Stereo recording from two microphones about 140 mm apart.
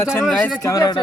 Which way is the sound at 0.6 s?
25° left (ahead or behind).